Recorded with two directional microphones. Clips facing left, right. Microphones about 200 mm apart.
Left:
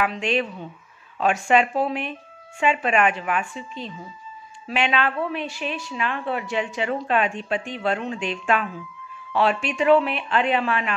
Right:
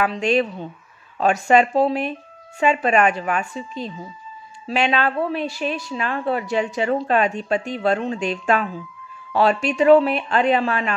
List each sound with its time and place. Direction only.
0.0 s a woman's voice: 40° right (ahead or behind)